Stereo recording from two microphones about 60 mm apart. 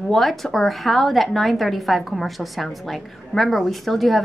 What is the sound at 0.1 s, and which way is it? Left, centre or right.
A woman's voice, centre.